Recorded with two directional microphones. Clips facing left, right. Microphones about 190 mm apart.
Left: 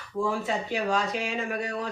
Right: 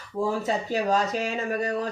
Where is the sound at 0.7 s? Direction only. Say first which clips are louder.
Right 4 dB; 40° right (ahead or behind).